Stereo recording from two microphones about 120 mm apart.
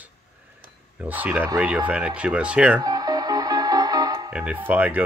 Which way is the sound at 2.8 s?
30° right (ahead or behind).